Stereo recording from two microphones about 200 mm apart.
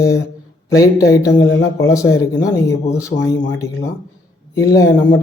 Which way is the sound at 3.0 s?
15° left (ahead or behind).